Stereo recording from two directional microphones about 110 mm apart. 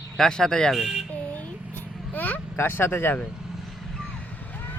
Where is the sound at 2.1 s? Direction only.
15° left (ahead or behind).